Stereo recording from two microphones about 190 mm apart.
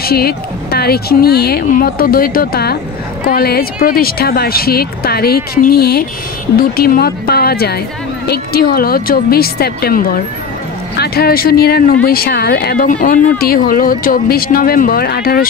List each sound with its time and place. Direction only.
0.0 s speech: 55° left (ahead or behind)